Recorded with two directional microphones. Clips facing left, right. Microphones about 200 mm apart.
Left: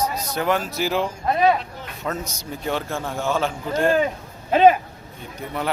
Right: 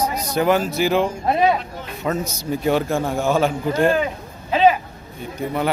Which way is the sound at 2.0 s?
10° right (ahead or behind).